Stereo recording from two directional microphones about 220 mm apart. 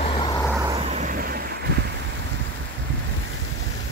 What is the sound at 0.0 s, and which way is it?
Vehicle, 25° left (ahead or behind).